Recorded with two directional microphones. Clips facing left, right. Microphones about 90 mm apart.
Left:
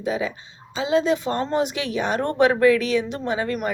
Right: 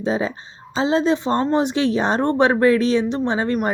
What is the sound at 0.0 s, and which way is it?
A woman's voice, 30° right (ahead or behind).